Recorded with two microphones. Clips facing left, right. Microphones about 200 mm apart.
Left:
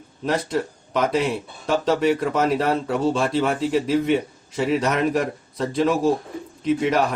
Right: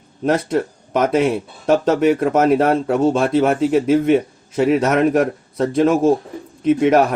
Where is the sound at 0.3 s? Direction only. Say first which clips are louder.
Right 5 dB; 50° right (ahead or behind).